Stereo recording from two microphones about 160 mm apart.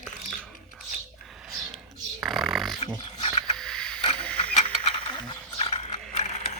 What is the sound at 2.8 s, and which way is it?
Dog, 40° left (ahead or behind).